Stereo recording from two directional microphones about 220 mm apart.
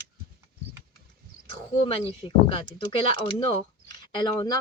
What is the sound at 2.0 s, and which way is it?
Speech, 25° left (ahead or behind).